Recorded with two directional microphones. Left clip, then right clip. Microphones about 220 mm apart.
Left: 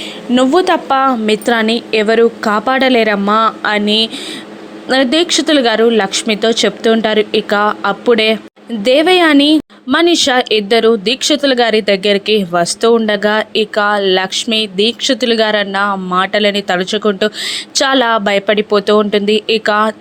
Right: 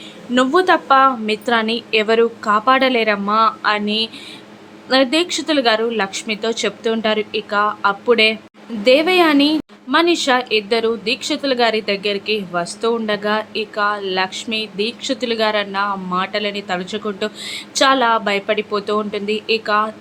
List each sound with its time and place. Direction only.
0.3 s speech: 25° left (ahead or behind)